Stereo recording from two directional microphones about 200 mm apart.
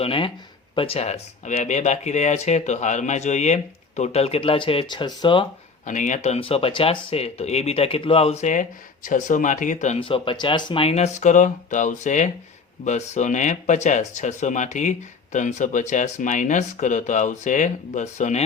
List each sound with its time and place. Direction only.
0.0 s speech: 25° left (ahead or behind)
5.8 s speech: 40° left (ahead or behind)